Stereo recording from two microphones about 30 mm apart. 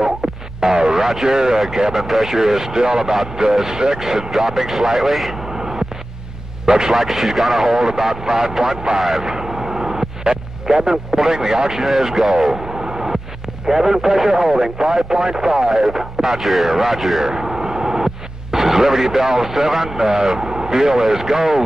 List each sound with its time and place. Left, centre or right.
0.6 s a sound: right
1.2 s speech: right
2.0 s speech: centre
6.6 s speech: right
6.9 s speech: centre
7.8 s speech: centre
9.0 s speech: centre
9.3 s vehicle: centre
12.0 s speech: centre
13.7 s speech: centre
15.9 s radio: centre
16.3 s speech: centre
17.2 s radio: centre
21.0 s speech: centre